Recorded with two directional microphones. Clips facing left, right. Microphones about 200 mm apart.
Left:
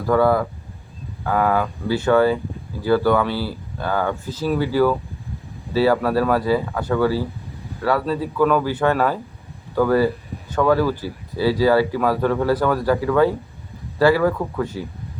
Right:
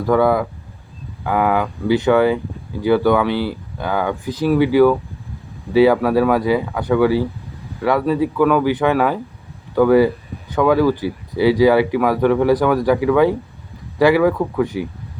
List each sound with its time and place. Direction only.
0.1 s speech: 15° right (ahead or behind)